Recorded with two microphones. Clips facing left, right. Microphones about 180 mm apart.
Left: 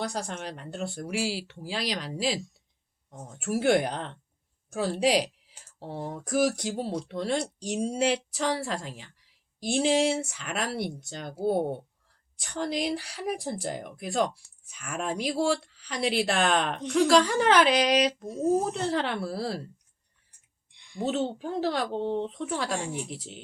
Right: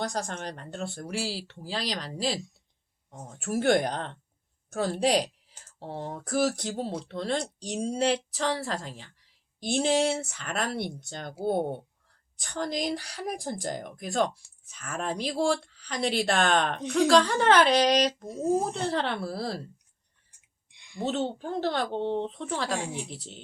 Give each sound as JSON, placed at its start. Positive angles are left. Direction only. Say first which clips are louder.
{"t": 0.0, "sound": "a woman's voice", "louder": "right 1 dB", "side_deg": 10}
{"t": 0.3, "sound": "speech", "louder": "even", "side_deg": -40}
{"t": 1.0, "sound": "a woman's voice", "louder": "left 5 dB", "side_deg": 10}
{"t": 3.3, "sound": "a woman's voice", "louder": "even", "side_deg": 5}
{"t": 17.7, "sound": "speech", "louder": "right 1 dB", "side_deg": -35}
{"t": 18.3, "sound": "speech", "louder": "left 1 dB", "side_deg": -10}
{"t": 18.9, "sound": "a woman's voice", "louder": "left 1 dB", "side_deg": 10}
{"t": 20.7, "sound": "a sound", "louder": "left 1 dB", "side_deg": -10}
{"t": 21.0, "sound": "a woman's voice", "louder": "left 1 dB", "side_deg": 5}